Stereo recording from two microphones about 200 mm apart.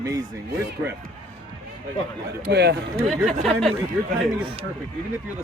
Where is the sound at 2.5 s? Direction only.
55° right (ahead or behind).